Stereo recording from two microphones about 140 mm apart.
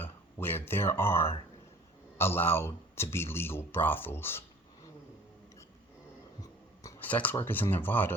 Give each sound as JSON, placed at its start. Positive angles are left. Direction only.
{"t": 0.0, "sound": "speech", "side_deg": 15}
{"t": 7.0, "sound": "speech", "side_deg": 10}